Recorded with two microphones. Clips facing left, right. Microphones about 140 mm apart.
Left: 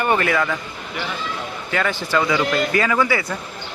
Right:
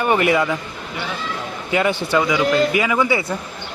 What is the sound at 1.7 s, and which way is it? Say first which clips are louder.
Speech: right 4 dB; 15° right (ahead or behind).